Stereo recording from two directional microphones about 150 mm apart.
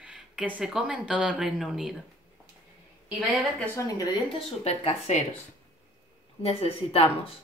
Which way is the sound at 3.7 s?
25° left (ahead or behind).